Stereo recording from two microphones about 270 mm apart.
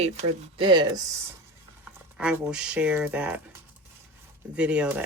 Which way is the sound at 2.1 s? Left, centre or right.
Centre.